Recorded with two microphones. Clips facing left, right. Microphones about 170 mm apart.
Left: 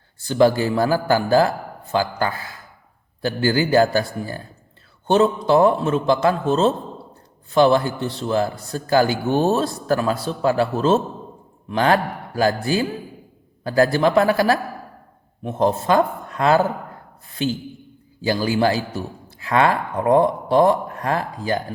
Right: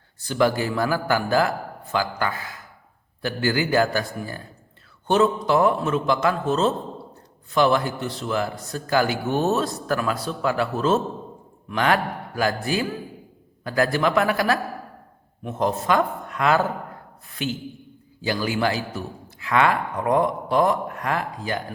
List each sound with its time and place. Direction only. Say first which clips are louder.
0.2 s a man's voice: left 5 dB; 30° left (ahead or behind)